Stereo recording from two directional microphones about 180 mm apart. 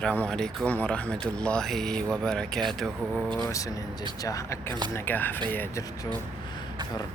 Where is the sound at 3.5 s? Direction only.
20° left (ahead or behind).